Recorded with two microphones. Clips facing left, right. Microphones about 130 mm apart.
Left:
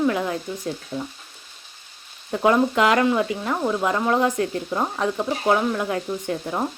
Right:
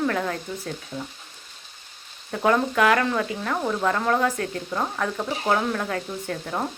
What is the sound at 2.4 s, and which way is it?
Speech, 20° left (ahead or behind).